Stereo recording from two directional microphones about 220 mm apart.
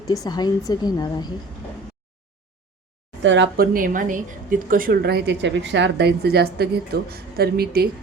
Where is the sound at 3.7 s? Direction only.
40° right (ahead or behind).